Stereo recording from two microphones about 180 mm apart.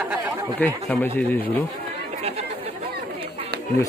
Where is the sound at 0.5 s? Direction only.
10° left (ahead or behind).